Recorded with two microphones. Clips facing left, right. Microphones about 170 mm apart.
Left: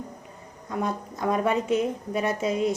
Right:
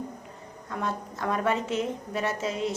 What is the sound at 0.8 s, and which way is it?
A woman's voice, 15° left (ahead or behind).